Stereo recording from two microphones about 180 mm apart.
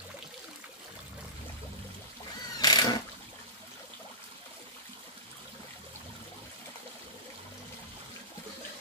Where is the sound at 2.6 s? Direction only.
20° left (ahead or behind).